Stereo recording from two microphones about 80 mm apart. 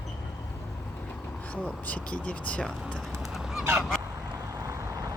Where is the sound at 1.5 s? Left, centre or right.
Centre.